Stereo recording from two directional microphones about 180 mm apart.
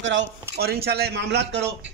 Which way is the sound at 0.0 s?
80° right.